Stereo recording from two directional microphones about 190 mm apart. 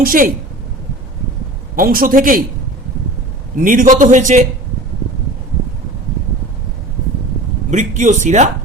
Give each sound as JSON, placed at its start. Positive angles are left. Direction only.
{"t": 0.0, "sound": "a man's voice", "side_deg": -45}
{"t": 1.7, "sound": "a man's voice", "side_deg": -50}
{"t": 3.6, "sound": "a man's voice", "side_deg": -45}
{"t": 7.7, "sound": "speech", "side_deg": -40}